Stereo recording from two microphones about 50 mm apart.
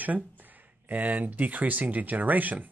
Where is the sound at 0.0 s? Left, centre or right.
Right.